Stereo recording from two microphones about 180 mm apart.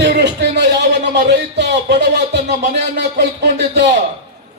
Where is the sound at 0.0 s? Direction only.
70° right (ahead or behind).